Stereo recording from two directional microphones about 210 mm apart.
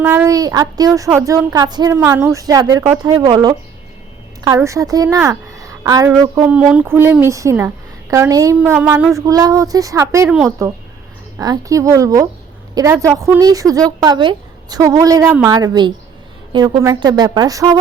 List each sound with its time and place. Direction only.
0.0 s a woman's voice: 10° right (ahead or behind)